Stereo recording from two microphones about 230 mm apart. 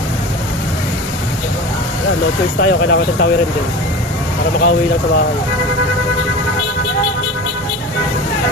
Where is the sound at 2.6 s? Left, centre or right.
Left.